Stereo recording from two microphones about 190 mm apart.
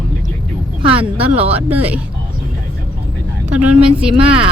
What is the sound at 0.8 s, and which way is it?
Speech, 30° right (ahead or behind).